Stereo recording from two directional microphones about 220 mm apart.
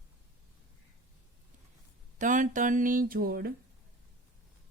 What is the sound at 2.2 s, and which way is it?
Speech, 35° right (ahead or behind).